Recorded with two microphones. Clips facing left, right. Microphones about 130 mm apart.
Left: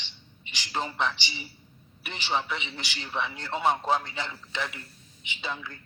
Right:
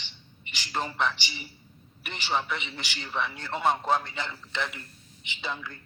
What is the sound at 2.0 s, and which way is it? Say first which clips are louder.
A man's voice: even; 15° left (ahead or behind).